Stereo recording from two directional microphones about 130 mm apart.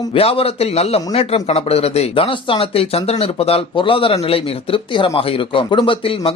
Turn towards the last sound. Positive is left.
turn(degrees=45)  # may be behind; listen again after turning